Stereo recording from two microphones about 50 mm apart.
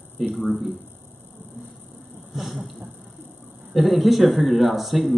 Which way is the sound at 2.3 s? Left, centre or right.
Centre.